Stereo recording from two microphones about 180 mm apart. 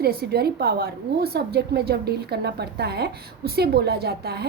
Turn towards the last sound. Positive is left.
turn(degrees=-65)  # may be behind; listen again after turning